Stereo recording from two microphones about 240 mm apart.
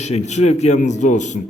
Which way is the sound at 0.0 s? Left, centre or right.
Left.